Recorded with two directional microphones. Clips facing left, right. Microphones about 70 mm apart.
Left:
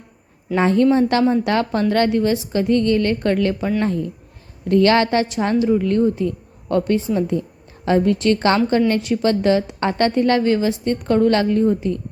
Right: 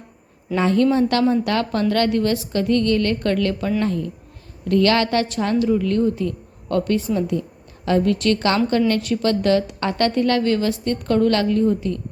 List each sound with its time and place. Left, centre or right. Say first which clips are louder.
0.5 s a woman's voice: left 2 dB; left